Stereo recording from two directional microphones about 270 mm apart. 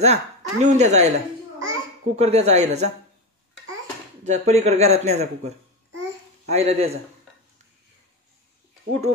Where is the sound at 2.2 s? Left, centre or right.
Right.